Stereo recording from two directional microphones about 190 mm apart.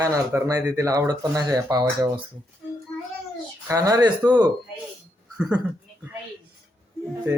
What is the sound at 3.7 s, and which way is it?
Speech, 15° right (ahead or behind).